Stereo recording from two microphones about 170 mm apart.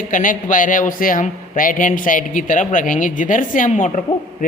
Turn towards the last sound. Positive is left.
turn(degrees=45)  # may be behind; listen again after turning